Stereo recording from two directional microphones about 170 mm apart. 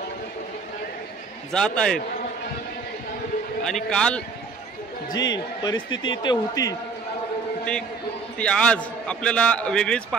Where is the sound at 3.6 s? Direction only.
5° left (ahead or behind).